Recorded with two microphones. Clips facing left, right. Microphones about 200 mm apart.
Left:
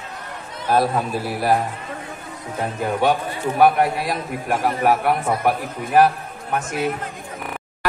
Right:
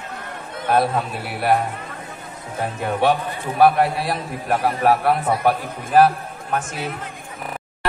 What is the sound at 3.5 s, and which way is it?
Speech, 30° right (ahead or behind).